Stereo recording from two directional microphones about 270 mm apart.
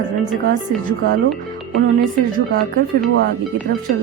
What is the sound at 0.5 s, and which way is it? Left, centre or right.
Speech, right.